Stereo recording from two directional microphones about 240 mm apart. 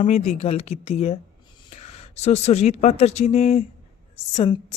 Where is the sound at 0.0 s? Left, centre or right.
Left.